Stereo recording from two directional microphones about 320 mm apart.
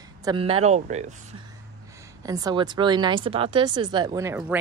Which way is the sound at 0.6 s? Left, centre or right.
Right.